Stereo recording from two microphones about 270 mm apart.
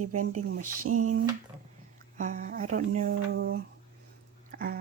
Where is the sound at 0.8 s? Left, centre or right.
Right.